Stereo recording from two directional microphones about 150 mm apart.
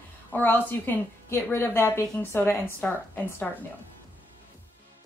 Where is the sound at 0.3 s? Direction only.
15° left (ahead or behind).